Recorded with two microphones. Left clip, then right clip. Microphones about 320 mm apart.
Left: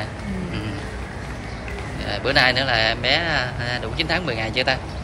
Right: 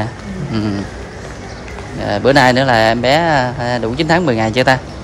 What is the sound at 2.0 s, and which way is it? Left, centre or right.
A man's voice, right.